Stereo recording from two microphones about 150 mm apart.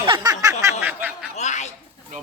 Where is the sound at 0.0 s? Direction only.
30° right (ahead or behind).